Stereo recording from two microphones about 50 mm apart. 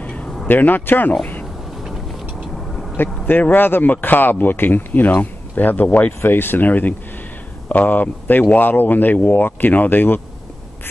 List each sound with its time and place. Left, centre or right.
0.0 s vehicle: left
0.5 s speech: left
3.0 s speech: left
6.2 s speech: left